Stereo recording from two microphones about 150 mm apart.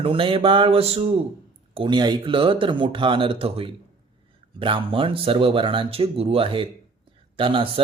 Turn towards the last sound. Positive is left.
turn(degrees=-35)  # may be behind; listen again after turning